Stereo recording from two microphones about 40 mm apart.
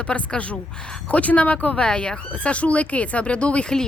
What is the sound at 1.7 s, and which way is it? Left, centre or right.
Speech, left.